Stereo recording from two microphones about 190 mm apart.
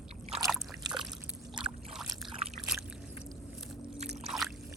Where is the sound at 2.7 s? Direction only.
5° right (ahead or behind).